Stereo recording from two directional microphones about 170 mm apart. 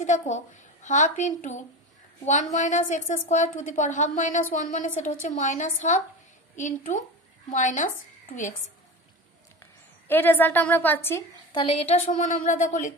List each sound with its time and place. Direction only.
0.0 s a woman's voice: 45° left (ahead or behind)
10.0 s a woman's voice: 10° left (ahead or behind)
11.5 s a woman's voice: 35° left (ahead or behind); by 12.9 s 50° left (ahead or behind)